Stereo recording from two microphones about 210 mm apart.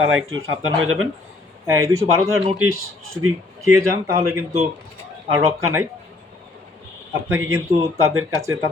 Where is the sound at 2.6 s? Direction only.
80° right.